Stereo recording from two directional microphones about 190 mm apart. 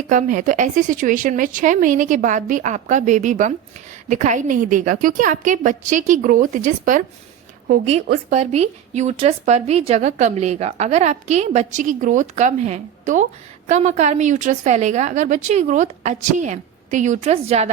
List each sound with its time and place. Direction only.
0.1 s a woman's voice: 45° right (ahead or behind)